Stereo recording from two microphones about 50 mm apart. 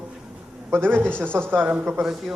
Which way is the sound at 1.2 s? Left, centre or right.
Right.